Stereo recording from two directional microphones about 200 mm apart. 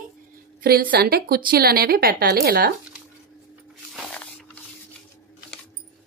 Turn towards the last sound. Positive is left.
turn(degrees=5)  # may be behind; listen again after turning